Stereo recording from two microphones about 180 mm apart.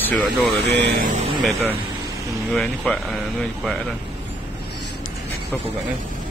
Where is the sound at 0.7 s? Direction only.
70° right (ahead or behind).